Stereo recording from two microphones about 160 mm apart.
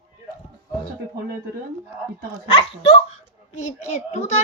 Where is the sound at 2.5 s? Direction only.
35° left (ahead or behind).